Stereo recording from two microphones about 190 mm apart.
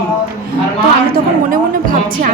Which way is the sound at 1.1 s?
45° right (ahead or behind).